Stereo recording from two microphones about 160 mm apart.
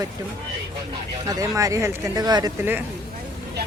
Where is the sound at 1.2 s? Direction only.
20° right (ahead or behind).